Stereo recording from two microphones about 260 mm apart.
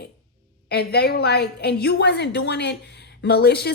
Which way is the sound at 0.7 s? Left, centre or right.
Left.